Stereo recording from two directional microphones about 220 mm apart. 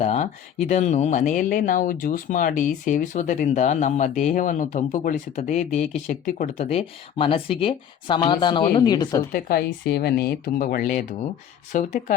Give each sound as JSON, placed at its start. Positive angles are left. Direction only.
{"t": 0.0, "sound": "speech", "side_deg": 30}
{"t": 9.3, "sound": "speech", "side_deg": 45}